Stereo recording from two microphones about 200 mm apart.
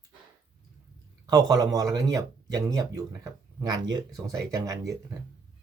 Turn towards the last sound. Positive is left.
turn(degrees=-15)  # may be behind; listen again after turning